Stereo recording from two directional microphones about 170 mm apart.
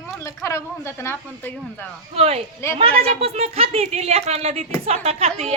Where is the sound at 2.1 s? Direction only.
35° right (ahead or behind).